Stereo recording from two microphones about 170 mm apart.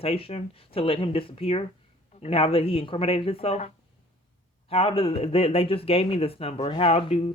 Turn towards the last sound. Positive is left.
turn(degrees=35)  # may be behind; listen again after turning